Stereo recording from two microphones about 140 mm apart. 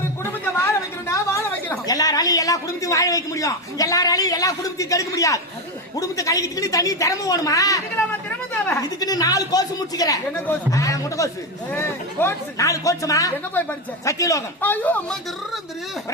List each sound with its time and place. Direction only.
0.7 s a woman's voice: 20° left (ahead or behind)
13.5 s a woman's voice: 15° left (ahead or behind)
14.6 s speech: 10° left (ahead or behind)